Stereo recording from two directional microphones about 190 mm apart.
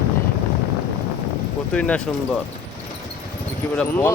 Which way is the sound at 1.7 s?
5° left (ahead or behind).